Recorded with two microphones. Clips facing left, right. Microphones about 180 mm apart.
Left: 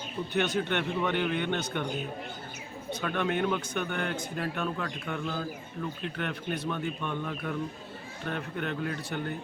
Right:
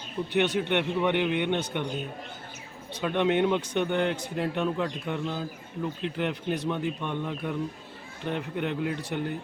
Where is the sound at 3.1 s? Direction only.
20° right (ahead or behind).